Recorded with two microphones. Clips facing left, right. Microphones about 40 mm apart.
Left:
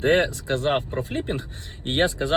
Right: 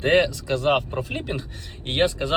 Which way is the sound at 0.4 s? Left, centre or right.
Left.